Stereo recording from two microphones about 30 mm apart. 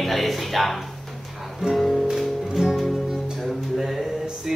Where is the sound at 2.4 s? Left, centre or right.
Centre.